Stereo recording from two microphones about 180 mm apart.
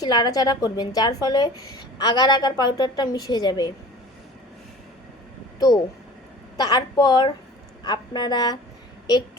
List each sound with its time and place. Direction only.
0.0 s a woman's voice: 20° left (ahead or behind)
5.5 s a woman's voice: 20° left (ahead or behind)